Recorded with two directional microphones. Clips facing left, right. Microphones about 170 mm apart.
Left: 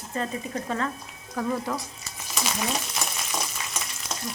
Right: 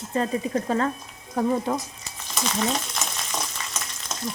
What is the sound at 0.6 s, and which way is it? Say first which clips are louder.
Speech: right 3 dB; 35° right (ahead or behind).